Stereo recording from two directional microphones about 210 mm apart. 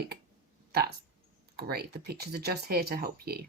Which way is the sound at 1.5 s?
50° right (ahead or behind).